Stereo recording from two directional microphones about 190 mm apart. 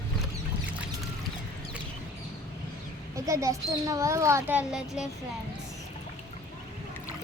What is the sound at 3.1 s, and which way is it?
A child's voice, 15° right (ahead or behind).